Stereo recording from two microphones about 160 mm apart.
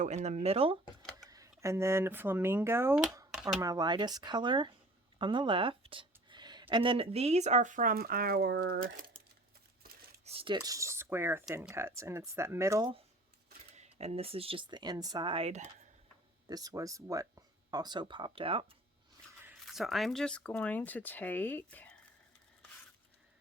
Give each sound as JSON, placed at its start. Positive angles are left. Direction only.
{"t": 0.0, "sound": "speech", "side_deg": -45}
{"t": 1.3, "sound": "speech", "side_deg": -20}
{"t": 10.2, "sound": "speech", "side_deg": -35}
{"t": 13.7, "sound": "speech", "side_deg": -45}
{"t": 16.5, "sound": "speech", "side_deg": -25}
{"t": 19.1, "sound": "a sound", "side_deg": -15}
{"t": 19.6, "sound": "speech", "side_deg": 0}